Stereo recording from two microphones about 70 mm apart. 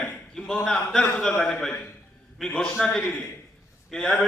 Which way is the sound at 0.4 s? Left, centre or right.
Centre.